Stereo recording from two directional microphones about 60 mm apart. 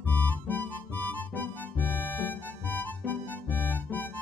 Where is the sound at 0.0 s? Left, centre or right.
Left.